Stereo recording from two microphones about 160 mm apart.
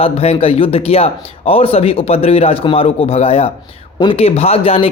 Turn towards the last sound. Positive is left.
turn(degrees=35)  # may be behind; listen again after turning